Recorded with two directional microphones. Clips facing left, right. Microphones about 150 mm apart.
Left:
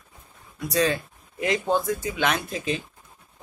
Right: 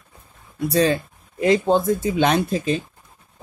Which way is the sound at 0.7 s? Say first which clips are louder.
Right 4 dB; 35° right (ahead or behind).